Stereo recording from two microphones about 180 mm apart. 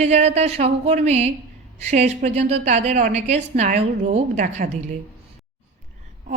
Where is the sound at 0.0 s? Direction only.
40° right (ahead or behind).